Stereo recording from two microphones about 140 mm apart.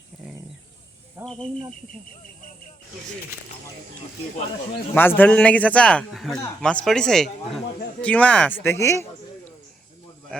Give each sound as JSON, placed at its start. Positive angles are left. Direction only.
{"t": 1.2, "sound": "speech", "side_deg": 5}
{"t": 4.9, "sound": "a man's voice", "side_deg": 15}